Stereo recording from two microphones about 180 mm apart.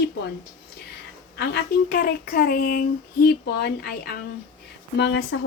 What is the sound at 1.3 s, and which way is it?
A woman's voice, 65° left (ahead or behind).